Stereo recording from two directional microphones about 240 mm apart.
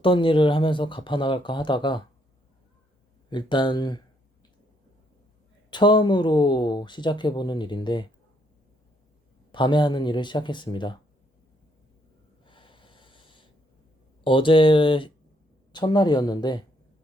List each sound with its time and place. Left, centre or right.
0.0 s speech: left
3.2 s speech: centre
5.7 s speech: centre
9.5 s speech: centre
12.5 s snort: centre
14.3 s speech: left